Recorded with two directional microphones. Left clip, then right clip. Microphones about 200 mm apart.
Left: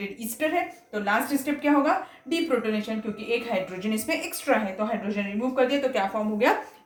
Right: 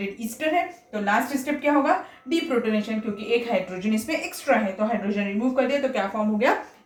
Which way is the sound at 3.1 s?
25° left (ahead or behind).